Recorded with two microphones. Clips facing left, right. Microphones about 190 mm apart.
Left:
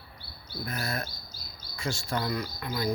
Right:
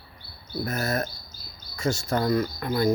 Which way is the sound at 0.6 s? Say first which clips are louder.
Right 6 dB; 45° right (ahead or behind).